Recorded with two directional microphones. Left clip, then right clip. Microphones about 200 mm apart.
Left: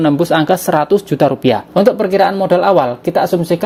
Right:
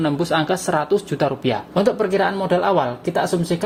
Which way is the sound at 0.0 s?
40° left (ahead or behind).